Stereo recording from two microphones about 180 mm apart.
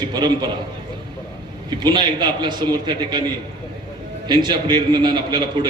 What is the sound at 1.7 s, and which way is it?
A man's voice, 25° right (ahead or behind).